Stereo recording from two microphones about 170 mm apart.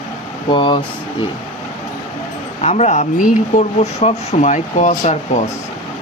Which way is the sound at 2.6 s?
40° left (ahead or behind).